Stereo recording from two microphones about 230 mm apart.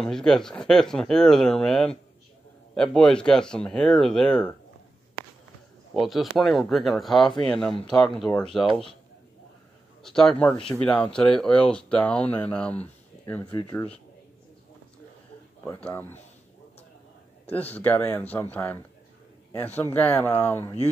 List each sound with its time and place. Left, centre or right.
0.0 s speech: centre
5.9 s speech: centre
10.0 s speech: centre
13.6 s speech: centre
15.6 s speech: centre
17.7 s speech: centre